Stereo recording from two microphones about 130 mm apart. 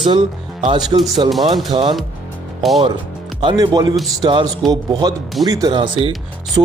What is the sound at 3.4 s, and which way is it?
Speech, 35° right (ahead or behind).